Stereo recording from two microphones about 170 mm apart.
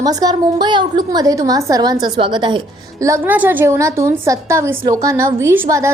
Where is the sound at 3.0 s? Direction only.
15° right (ahead or behind).